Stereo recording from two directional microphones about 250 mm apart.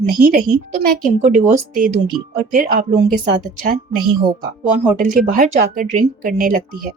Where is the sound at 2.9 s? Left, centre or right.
Right.